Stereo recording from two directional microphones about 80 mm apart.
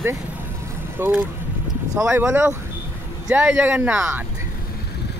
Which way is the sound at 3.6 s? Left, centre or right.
Centre.